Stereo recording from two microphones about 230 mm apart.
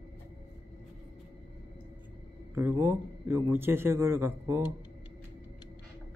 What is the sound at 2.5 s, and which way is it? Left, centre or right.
A man's voice, centre.